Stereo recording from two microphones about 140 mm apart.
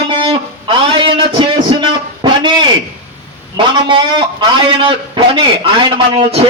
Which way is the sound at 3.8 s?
35° right (ahead or behind).